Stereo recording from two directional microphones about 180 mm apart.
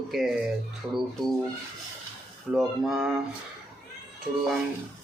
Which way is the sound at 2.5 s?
Centre (ahead or behind).